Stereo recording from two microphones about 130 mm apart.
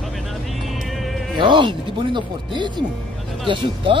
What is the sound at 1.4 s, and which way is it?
Speech, 40° right (ahead or behind).